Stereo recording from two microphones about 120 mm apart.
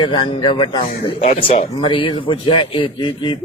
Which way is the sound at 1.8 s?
45° left (ahead or behind).